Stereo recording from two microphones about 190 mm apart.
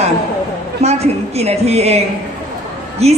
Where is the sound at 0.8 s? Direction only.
35° right (ahead or behind).